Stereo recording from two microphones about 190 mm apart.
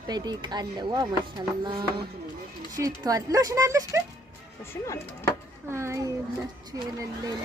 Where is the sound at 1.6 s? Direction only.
20° right (ahead or behind).